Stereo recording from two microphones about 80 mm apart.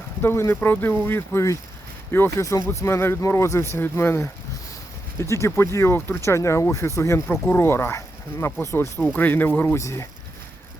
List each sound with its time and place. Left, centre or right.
0.2 s speech: left
2.4 s speech: left
9.1 s speech: left
9.7 s speech: left